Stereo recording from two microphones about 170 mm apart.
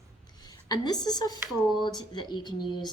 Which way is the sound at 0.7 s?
25° left (ahead or behind).